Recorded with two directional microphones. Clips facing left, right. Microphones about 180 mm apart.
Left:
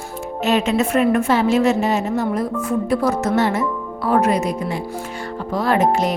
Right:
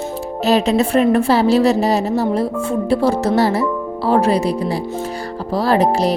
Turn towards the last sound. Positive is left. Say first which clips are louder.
# right 2 dB
turn(degrees=-35)  # may be behind; listen again after turning